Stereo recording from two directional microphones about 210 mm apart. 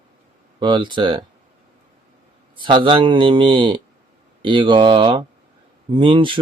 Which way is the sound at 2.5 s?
25° right (ahead or behind).